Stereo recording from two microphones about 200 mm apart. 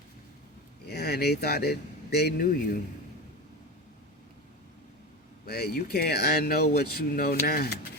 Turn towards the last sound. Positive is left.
turn(degrees=50)  # may be behind; listen again after turning